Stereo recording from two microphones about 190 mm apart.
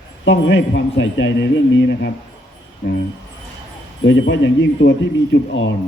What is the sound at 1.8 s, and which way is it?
Speech, 65° left (ahead or behind).